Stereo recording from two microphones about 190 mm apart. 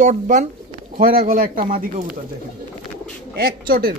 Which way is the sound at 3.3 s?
50° right (ahead or behind).